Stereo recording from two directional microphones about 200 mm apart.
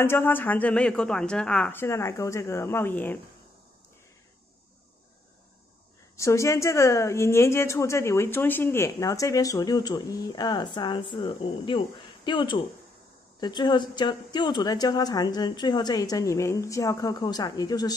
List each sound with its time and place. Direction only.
0.0 s a woman's voice: 10° left (ahead or behind)
6.1 s a woman's voice: 15° left (ahead or behind)